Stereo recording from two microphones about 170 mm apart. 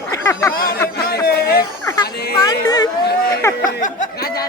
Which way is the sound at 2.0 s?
70° left (ahead or behind).